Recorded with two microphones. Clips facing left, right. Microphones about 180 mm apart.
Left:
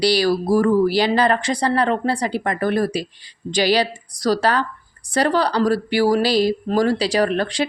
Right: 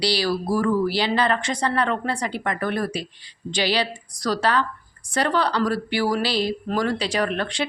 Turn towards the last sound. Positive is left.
turn(degrees=35)  # may be behind; listen again after turning